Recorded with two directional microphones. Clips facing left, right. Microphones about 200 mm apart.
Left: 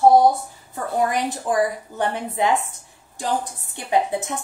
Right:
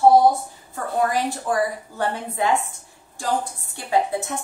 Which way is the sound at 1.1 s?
20° left (ahead or behind).